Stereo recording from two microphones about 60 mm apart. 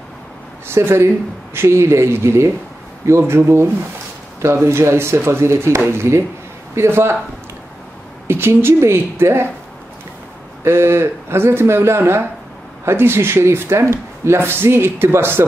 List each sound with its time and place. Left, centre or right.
0.7 s speech: right
8.3 s speech: right
10.6 s speech: right